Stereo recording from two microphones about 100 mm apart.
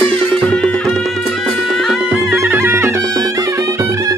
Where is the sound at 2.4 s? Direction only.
25° right (ahead or behind).